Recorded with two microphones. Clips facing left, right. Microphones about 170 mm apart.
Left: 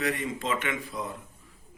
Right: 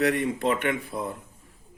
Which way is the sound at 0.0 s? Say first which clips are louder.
Right 6 dB; 65° right (ahead or behind).